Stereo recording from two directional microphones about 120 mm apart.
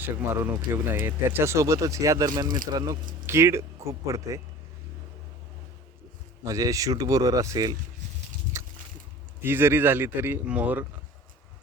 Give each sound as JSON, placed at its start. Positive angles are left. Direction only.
{"t": 0.0, "sound": "speech", "side_deg": -20}
{"t": 6.4, "sound": "speech", "side_deg": -25}
{"t": 8.5, "sound": "a sound", "side_deg": -25}
{"t": 9.4, "sound": "speech", "side_deg": -20}